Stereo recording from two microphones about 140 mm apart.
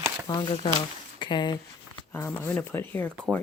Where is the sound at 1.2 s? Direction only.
35° left (ahead or behind).